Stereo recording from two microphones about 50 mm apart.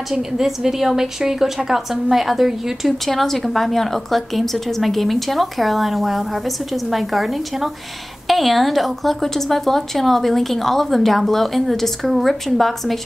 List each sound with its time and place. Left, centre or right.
0.1 s a woman's voice: centre